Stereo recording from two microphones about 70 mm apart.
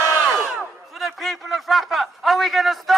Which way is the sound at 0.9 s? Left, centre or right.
Centre.